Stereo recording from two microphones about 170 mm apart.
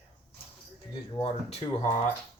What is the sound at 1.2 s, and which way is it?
Speech, 35° left (ahead or behind).